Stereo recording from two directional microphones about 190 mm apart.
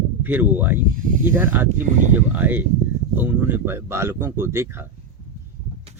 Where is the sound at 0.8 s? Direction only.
45° right (ahead or behind).